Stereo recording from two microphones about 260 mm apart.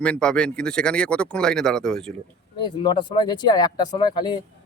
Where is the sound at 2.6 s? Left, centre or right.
Centre.